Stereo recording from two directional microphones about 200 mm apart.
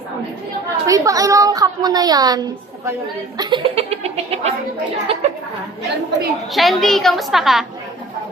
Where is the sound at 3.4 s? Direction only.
25° right (ahead or behind).